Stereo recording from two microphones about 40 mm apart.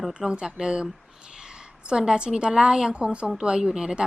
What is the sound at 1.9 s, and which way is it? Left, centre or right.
A woman's voice, right.